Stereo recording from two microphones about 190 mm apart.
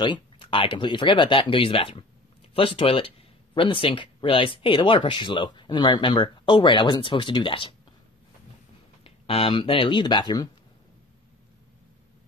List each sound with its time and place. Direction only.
0.0 s speech: 25° left (ahead or behind)
9.0 s speech: 30° left (ahead or behind)